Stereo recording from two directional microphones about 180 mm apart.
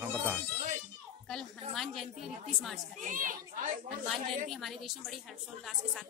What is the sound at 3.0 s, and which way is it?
Speech, 45° right (ahead or behind).